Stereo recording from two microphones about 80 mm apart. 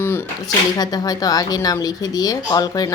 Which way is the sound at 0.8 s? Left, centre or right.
Left.